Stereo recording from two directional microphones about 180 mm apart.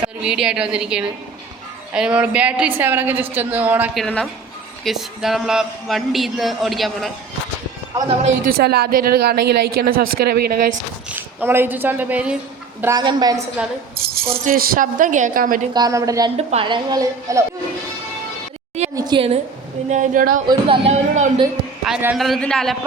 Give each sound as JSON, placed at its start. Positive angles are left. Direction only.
{"t": 0.0, "sound": "a woman's voice", "side_deg": -5}
{"t": 4.0, "sound": "speech", "side_deg": 5}
{"t": 8.4, "sound": "a woman's voice", "side_deg": -60}
{"t": 11.1, "sound": "speech", "side_deg": -10}
{"t": 12.8, "sound": "a woman's voice", "side_deg": -20}
{"t": 14.0, "sound": "speech", "side_deg": -55}
{"t": 14.3, "sound": "speech", "side_deg": -30}
{"t": 14.5, "sound": "a woman's voice", "side_deg": -50}
{"t": 15.7, "sound": "a woman's voice", "side_deg": -20}
{"t": 16.5, "sound": "a woman's voice", "side_deg": -30}
{"t": 18.9, "sound": "a woman's voice", "side_deg": -25}
{"t": 19.9, "sound": "a woman's voice", "side_deg": -45}
{"t": 20.5, "sound": "a woman's voice", "side_deg": -30}
{"t": 21.8, "sound": "speech", "side_deg": -5}